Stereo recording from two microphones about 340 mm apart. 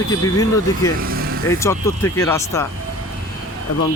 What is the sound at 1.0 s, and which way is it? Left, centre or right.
Vehicle, right.